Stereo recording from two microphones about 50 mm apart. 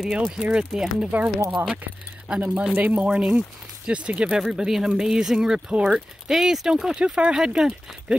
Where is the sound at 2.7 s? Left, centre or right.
Right.